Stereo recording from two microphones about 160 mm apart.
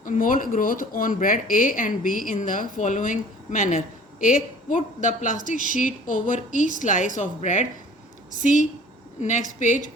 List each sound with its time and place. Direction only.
0.0 s a woman's voice: 55° left (ahead or behind)